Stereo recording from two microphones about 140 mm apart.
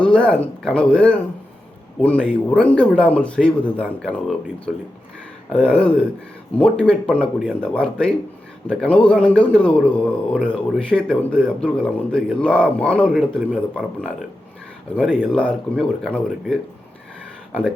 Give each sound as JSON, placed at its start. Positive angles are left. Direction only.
{"t": 0.0, "sound": "speech", "side_deg": 10}